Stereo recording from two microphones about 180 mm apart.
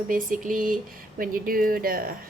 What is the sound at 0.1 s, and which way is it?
A woman's voice, 50° right (ahead or behind).